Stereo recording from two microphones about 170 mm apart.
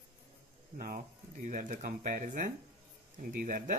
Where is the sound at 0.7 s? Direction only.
60° right (ahead or behind).